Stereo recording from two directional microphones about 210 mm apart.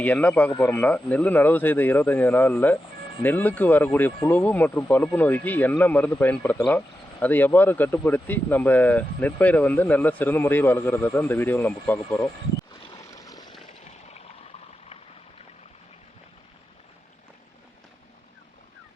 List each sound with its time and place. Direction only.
0.0 s speech: 5° left (ahead or behind)
12.8 s vehicle: 20° left (ahead or behind)